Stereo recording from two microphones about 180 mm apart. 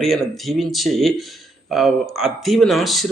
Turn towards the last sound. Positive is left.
turn(degrees=0)  # may be behind; listen again after turning